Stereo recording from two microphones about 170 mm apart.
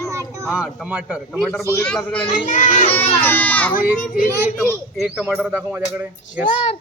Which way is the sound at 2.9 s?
10° left (ahead or behind).